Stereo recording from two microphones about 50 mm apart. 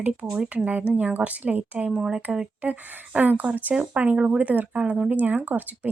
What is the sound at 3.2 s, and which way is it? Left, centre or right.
Speech, right.